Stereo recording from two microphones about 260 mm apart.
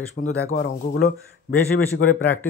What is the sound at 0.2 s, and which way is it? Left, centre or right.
Speech, left.